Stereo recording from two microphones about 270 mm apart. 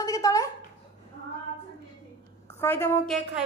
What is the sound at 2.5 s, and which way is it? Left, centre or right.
Speech, centre.